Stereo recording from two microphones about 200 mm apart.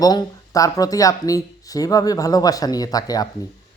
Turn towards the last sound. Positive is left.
turn(degrees=20)  # may be behind; listen again after turning